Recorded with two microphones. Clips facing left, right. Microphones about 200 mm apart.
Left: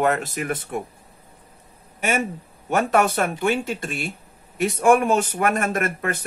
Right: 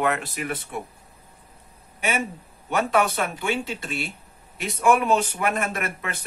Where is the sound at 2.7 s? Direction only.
45° left (ahead or behind).